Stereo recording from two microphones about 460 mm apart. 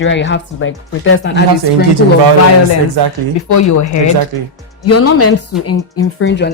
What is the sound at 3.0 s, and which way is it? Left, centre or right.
Speech, right.